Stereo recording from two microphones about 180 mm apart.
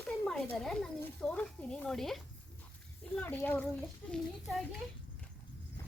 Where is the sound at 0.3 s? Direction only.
Centre (ahead or behind).